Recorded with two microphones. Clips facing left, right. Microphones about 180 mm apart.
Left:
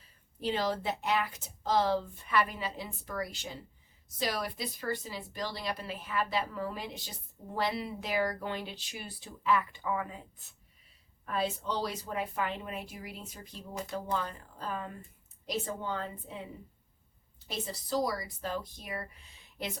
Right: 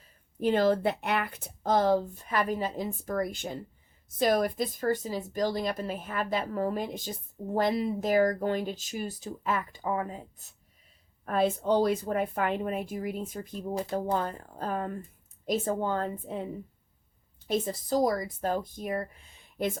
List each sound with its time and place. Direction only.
0.3 s speech: 50° right (ahead or behind)
17.5 s speech: 50° right (ahead or behind)